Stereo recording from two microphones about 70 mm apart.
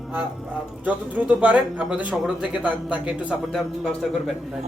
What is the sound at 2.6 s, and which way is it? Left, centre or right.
Speech, centre.